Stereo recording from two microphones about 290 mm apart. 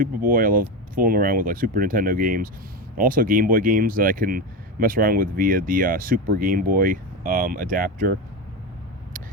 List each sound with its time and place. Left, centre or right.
0.0 s speech: right